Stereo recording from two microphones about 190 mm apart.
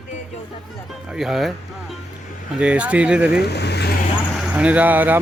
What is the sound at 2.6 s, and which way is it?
Speech, 5° right (ahead or behind).